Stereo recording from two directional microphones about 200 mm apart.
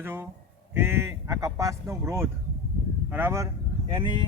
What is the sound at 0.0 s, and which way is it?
Speech, 10° right (ahead or behind).